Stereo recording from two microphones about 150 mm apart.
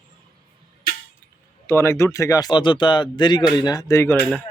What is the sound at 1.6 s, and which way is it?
Speech, 15° left (ahead or behind).